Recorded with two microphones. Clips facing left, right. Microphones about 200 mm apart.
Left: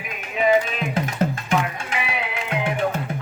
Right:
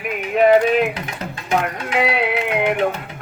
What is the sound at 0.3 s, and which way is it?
Music, 60° right (ahead or behind).